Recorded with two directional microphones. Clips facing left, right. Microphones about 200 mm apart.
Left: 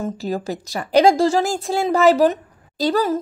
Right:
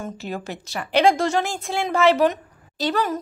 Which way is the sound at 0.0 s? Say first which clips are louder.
Left 6 dB; 35° left (ahead or behind).